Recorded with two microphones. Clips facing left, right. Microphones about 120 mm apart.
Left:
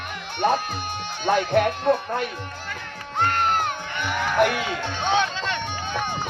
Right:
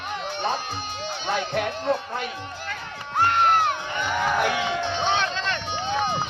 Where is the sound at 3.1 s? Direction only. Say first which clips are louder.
Right 2 dB; 5° right (ahead or behind).